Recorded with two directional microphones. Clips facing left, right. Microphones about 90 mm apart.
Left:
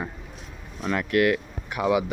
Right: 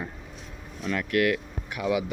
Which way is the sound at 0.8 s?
35° left (ahead or behind).